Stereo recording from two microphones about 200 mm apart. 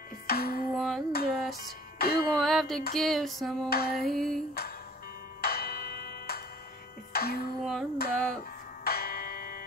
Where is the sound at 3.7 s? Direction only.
50° left (ahead or behind).